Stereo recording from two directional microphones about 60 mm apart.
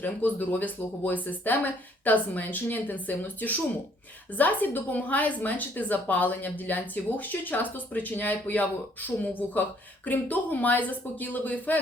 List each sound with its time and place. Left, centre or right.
0.0 s a woman's voice: left